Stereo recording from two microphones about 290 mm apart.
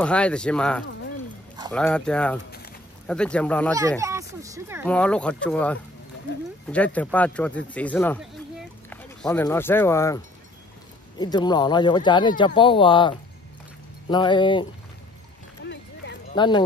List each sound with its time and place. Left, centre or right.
0.0 s speech: centre
4.0 s speech: centre
4.8 s speech: centre
15.6 s a sound: left
16.3 s speech: centre